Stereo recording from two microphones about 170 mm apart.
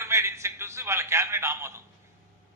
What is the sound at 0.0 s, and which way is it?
A man's voice, 15° right (ahead or behind).